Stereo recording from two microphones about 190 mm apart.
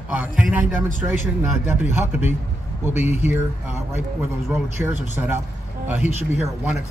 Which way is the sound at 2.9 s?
40° left (ahead or behind).